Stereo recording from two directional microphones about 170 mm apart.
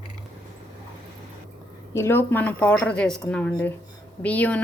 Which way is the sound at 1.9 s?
15° left (ahead or behind).